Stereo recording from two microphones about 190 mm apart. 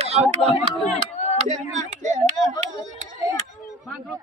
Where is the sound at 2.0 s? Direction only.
40° right (ahead or behind).